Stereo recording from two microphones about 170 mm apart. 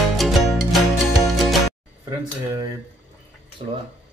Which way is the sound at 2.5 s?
20° right (ahead or behind).